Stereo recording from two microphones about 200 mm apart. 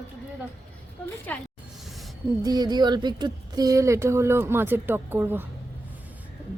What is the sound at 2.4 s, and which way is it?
Speech, 20° right (ahead or behind).